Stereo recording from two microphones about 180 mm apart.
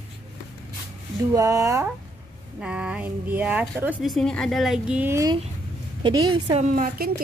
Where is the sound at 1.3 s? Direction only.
20° right (ahead or behind).